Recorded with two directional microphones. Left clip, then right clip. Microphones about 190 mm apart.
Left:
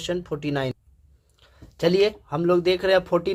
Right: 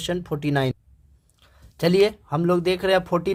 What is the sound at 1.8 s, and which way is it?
Speech, 25° right (ahead or behind).